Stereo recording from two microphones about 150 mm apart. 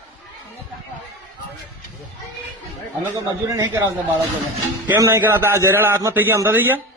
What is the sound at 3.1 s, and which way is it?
Speech, 20° right (ahead or behind).